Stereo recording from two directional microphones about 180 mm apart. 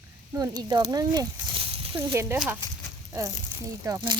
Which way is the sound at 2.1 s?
15° right (ahead or behind).